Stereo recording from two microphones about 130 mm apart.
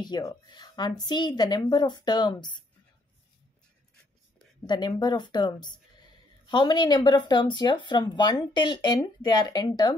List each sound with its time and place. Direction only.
0.0 s speech: 30° left (ahead or behind)
4.6 s speech: 35° left (ahead or behind)